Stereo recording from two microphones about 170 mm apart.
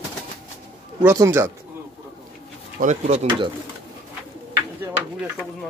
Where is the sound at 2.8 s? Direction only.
45° right (ahead or behind).